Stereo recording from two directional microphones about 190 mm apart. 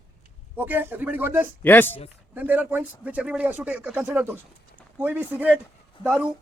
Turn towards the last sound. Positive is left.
turn(degrees=-5)  # may be behind; listen again after turning